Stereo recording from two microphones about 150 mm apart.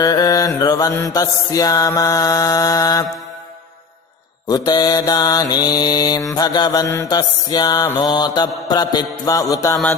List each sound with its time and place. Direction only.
0.0 s mantra: 25° left (ahead or behind)
4.4 s mantra: 25° left (ahead or behind)